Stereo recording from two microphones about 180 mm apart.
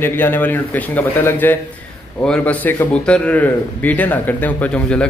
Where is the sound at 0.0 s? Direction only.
10° left (ahead or behind).